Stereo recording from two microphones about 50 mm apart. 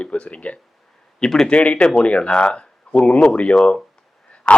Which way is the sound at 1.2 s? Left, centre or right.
Centre.